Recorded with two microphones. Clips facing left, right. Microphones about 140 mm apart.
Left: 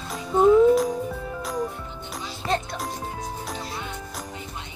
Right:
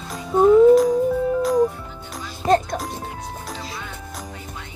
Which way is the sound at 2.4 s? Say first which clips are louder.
Right 9 dB; 45° right (ahead or behind).